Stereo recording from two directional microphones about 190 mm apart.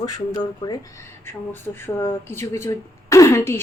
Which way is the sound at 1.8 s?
10° left (ahead or behind).